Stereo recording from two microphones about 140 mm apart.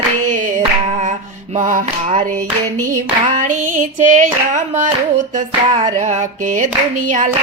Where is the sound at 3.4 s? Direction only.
65° right (ahead or behind).